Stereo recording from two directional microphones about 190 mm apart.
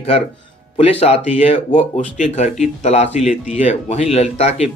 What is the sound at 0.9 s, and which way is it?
Speech, 30° left (ahead or behind).